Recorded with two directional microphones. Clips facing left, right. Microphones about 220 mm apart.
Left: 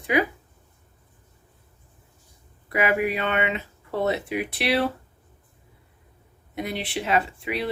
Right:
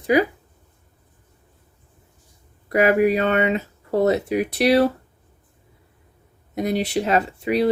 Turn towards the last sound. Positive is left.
turn(degrees=-40)  # may be behind; listen again after turning